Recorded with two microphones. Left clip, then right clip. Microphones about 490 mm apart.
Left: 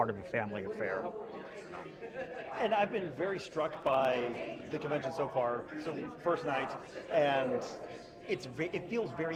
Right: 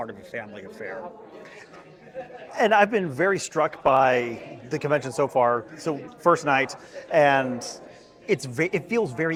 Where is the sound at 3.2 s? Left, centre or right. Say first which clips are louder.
Right 13 dB; right.